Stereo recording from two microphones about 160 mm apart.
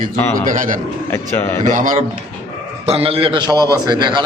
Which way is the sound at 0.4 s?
55° right (ahead or behind).